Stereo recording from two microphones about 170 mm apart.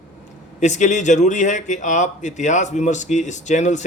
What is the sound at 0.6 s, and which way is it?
Speech, 45° left (ahead or behind).